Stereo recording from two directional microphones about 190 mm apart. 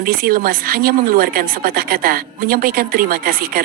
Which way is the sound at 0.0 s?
50° right (ahead or behind).